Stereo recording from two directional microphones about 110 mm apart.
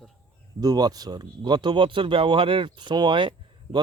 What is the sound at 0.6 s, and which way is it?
Speech, 35° right (ahead or behind).